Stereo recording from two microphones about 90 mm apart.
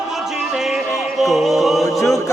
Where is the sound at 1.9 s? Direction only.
35° left (ahead or behind).